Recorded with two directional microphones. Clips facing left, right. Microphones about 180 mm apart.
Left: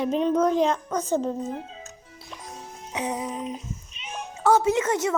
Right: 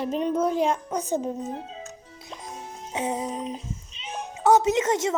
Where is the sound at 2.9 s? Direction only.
25° right (ahead or behind).